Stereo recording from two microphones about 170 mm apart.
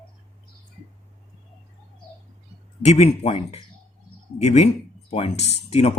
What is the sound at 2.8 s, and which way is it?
Speech, 40° left (ahead or behind).